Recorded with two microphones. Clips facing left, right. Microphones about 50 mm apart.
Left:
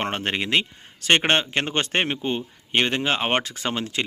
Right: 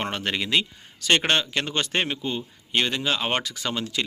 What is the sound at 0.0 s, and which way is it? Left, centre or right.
Speech, left.